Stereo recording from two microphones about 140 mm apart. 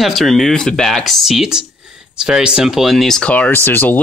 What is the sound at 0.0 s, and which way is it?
Speech, centre (ahead or behind).